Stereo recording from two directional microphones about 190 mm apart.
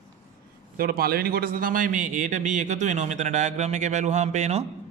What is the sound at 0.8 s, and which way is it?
A man's voice, 50° right (ahead or behind).